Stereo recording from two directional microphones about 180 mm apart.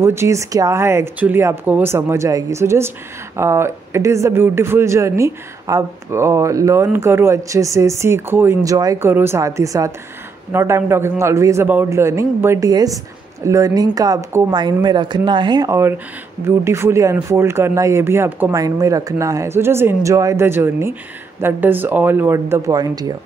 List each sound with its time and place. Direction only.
0.0 s a man's voice: 15° right (ahead or behind)